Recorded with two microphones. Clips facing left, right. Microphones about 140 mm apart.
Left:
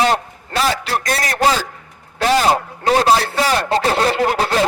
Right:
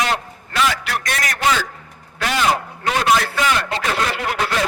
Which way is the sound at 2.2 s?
35° left (ahead or behind).